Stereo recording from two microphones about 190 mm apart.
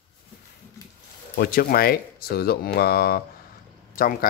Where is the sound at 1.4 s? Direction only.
50° left (ahead or behind).